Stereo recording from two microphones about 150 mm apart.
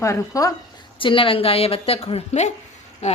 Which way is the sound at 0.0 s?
20° left (ahead or behind).